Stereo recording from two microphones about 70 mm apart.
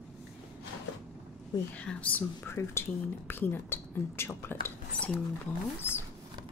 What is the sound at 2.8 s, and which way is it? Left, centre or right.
Speech, left.